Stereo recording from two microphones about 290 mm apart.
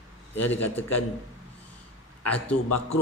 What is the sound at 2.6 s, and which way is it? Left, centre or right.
Speech, left.